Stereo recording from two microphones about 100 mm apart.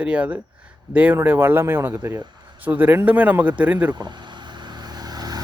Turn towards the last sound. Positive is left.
turn(degrees=-40)  # may be behind; listen again after turning